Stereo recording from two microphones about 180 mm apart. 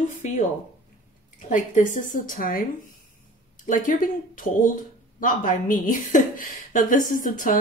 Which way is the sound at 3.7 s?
45° left (ahead or behind).